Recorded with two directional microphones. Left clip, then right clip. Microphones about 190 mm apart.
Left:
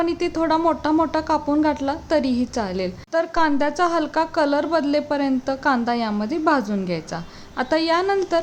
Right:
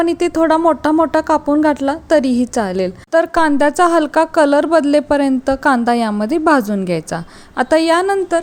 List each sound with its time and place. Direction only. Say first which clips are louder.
0.0 s speech: right 7 dB; 35° right (ahead or behind)